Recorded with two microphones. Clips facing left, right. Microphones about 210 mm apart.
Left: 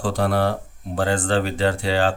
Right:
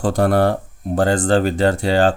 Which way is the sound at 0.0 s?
45° right (ahead or behind).